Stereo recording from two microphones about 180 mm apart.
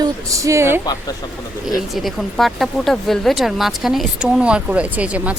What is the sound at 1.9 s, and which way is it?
A woman's voice, centre (ahead or behind).